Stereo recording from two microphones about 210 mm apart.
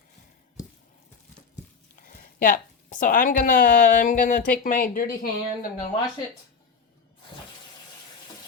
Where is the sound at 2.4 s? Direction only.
40° left (ahead or behind).